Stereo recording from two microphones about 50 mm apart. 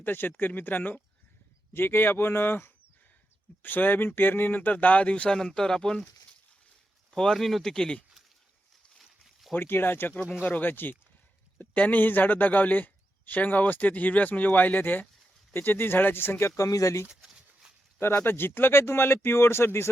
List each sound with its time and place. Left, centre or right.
0.0 s speech: left
1.7 s speech: left
3.6 s speech: left
5.3 s speech: centre
7.1 s speech: centre
9.0 s a sound: centre
9.6 s speech: left
16.6 s speech: left
17.2 s a sound: centre
18.0 s speech: left